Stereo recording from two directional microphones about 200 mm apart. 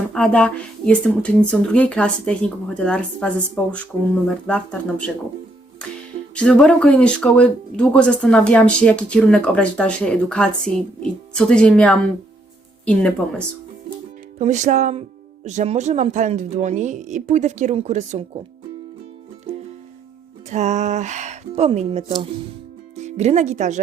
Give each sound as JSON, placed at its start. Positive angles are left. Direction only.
{"t": 0.1, "sound": "speech", "side_deg": 5}
{"t": 6.3, "sound": "speech", "side_deg": 5}
{"t": 14.3, "sound": "speech", "side_deg": -35}
{"t": 20.5, "sound": "speech", "side_deg": -35}